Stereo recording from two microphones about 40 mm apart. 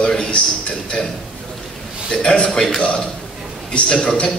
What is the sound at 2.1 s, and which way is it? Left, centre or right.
A man's voice, centre.